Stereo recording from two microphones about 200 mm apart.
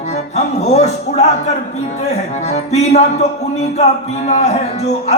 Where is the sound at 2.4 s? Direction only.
35° left (ahead or behind).